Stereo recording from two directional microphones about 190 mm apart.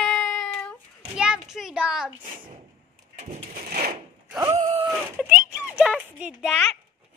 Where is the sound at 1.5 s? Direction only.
5° right (ahead or behind).